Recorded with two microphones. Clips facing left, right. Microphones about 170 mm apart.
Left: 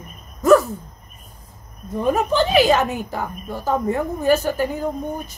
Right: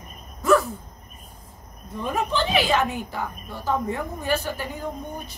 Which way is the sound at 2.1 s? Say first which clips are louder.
Left 5 dB; 45° left (ahead or behind).